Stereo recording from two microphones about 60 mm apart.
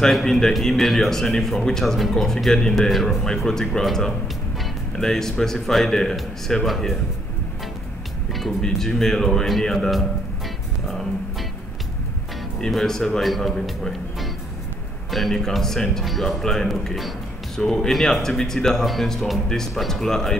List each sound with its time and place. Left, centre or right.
0.0 s speech: centre
8.4 s speech: centre
12.5 s speech: centre